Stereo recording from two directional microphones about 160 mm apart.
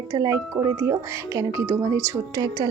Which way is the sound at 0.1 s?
20° right (ahead or behind).